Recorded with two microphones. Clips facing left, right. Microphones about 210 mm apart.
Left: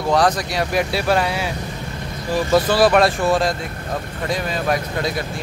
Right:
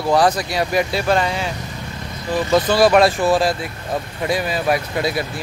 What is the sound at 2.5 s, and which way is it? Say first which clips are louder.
Speech: right 1 dB; centre (ahead or behind).